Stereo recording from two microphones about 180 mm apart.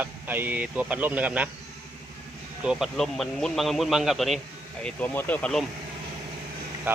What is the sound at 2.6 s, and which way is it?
Speech, 5° right (ahead or behind).